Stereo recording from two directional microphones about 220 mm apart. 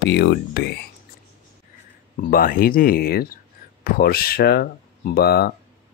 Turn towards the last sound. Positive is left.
turn(degrees=45)  # may be behind; listen again after turning